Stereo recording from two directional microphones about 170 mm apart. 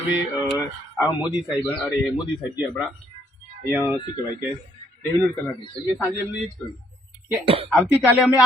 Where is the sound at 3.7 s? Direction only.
10° right (ahead or behind).